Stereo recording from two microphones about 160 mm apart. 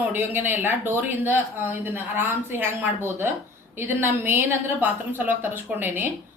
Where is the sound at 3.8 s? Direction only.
15° right (ahead or behind).